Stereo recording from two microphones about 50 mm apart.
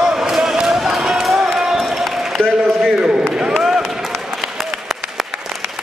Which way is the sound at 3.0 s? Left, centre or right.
Centre.